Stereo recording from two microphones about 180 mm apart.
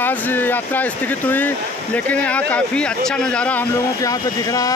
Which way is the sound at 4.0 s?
20° left (ahead or behind).